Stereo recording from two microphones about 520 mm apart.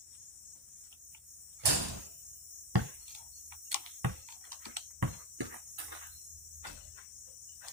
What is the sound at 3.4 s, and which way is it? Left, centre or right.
Typing, right.